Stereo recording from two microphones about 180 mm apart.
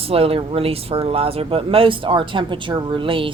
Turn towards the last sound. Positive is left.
turn(degrees=-30)  # may be behind; listen again after turning